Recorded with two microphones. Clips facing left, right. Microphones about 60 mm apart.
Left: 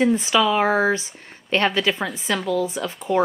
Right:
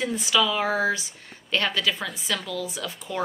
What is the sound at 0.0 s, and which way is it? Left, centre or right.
Speech, left.